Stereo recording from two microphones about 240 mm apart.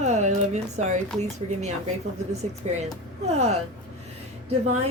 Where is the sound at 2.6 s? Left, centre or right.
Right.